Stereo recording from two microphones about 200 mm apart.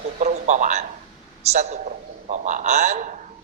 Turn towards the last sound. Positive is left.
turn(degrees=-35)  # may be behind; listen again after turning